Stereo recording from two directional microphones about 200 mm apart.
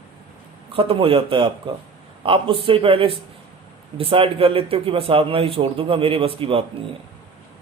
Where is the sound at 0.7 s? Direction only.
25° right (ahead or behind).